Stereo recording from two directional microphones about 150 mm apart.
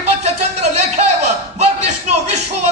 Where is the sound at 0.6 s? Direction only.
50° right (ahead or behind).